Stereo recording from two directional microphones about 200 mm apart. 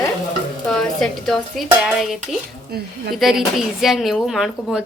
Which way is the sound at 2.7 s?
50° right (ahead or behind).